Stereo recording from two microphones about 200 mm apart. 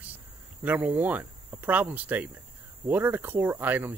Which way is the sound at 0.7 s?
10° right (ahead or behind).